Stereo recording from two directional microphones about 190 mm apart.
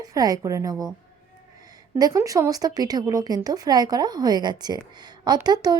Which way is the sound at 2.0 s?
20° right (ahead or behind).